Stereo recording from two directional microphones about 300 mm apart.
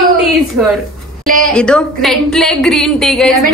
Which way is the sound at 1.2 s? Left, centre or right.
Right.